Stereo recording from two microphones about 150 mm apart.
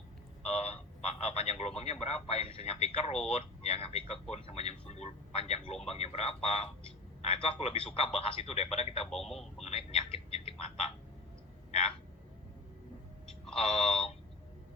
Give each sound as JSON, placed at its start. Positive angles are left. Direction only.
{"t": 0.4, "sound": "speech", "side_deg": 45}
{"t": 9.1, "sound": "speech", "side_deg": 0}
{"t": 9.6, "sound": "a sound", "side_deg": 40}
{"t": 13.6, "sound": "speech", "side_deg": 40}